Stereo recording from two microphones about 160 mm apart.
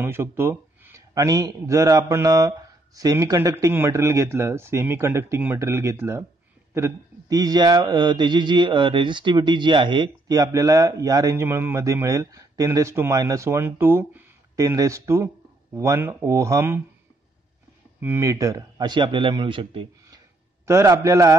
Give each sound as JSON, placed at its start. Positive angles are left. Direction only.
{"t": 0.0, "sound": "speech", "side_deg": -15}
{"t": 18.0, "sound": "speech", "side_deg": -15}
{"t": 20.6, "sound": "speech", "side_deg": -20}